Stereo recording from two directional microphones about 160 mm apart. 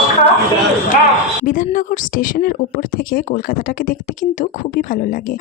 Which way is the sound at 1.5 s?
55° left (ahead or behind).